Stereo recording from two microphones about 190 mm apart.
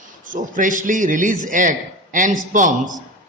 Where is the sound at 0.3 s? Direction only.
45° right (ahead or behind).